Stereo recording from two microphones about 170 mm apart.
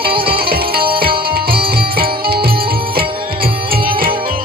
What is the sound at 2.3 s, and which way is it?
Music, 65° right (ahead or behind).